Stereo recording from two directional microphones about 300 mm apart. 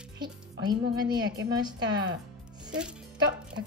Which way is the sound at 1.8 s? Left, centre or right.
Right.